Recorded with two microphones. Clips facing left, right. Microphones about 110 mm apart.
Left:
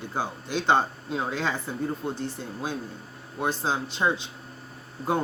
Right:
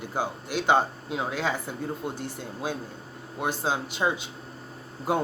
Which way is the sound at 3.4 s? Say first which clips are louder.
Left 1 dB; 15° right (ahead or behind).